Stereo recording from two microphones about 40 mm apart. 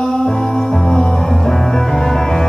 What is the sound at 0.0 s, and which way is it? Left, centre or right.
Music, centre.